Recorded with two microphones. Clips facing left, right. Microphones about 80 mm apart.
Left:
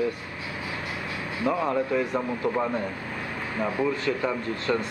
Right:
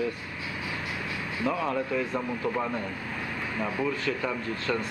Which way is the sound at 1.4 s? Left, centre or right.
Centre.